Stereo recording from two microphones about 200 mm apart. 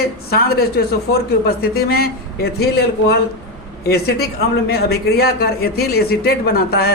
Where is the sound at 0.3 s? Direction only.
50° left (ahead or behind).